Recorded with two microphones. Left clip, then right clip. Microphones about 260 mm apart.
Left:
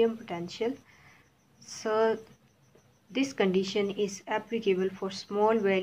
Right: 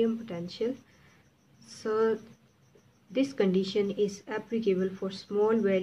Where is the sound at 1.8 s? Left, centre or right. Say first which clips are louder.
Left 1 dB; centre.